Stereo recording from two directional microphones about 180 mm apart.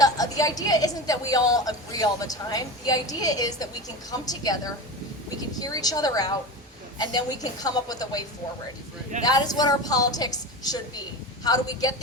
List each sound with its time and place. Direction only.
0.0 s a woman's voice: 20° left (ahead or behind)
9.2 s a woman's voice: 20° left (ahead or behind)